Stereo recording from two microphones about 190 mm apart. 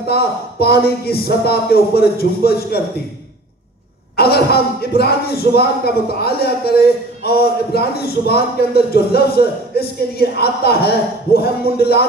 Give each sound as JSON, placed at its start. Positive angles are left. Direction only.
{"t": 0.0, "sound": "speech", "side_deg": 55}
{"t": 4.2, "sound": "speech", "side_deg": 55}